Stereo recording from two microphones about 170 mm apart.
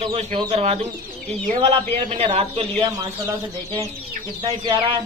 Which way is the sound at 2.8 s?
25° right (ahead or behind).